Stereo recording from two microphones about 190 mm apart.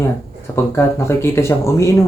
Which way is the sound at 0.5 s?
15° left (ahead or behind).